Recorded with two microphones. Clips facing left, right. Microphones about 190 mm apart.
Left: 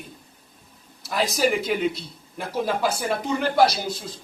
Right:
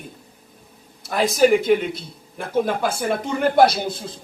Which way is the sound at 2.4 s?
50° right (ahead or behind).